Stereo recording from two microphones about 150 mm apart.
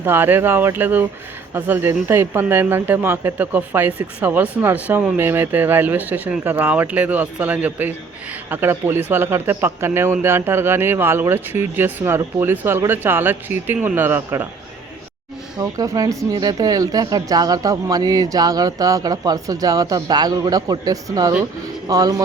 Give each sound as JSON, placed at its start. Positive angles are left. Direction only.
{"t": 0.0, "sound": "speech", "side_deg": -15}
{"t": 15.5, "sound": "speech", "side_deg": -25}